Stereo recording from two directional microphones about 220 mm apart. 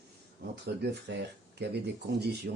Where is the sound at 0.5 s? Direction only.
50° right (ahead or behind).